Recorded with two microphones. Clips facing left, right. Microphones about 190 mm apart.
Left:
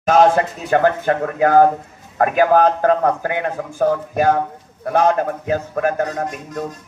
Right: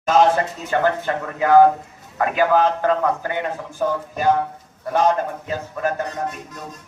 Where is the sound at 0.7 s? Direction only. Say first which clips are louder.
Left 5 dB; 50° left (ahead or behind).